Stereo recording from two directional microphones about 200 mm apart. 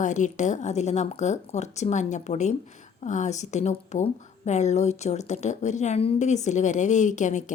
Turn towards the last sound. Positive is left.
turn(degrees=40)  # may be behind; listen again after turning